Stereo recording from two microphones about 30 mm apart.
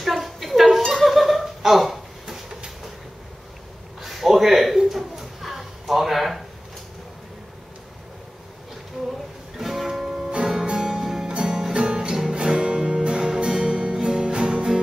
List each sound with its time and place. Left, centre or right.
0.0 s a sound: centre
1.0 s chuckle: centre
4.0 s a sound: centre
9.6 s music: centre
10.4 s music: right
11.2 s music: right